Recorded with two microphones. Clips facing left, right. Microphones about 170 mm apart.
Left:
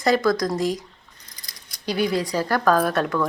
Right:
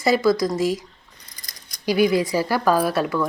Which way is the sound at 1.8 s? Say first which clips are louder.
Right 4 dB; 10° right (ahead or behind).